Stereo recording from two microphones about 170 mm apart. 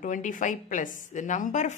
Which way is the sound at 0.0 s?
50° left (ahead or behind).